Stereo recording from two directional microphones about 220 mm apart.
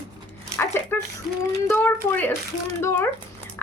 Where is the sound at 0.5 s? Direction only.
10° left (ahead or behind).